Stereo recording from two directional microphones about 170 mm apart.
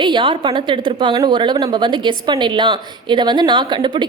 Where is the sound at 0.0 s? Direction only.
30° right (ahead or behind).